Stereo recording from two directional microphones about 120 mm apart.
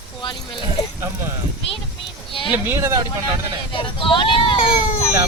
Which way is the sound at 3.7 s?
45° left (ahead or behind).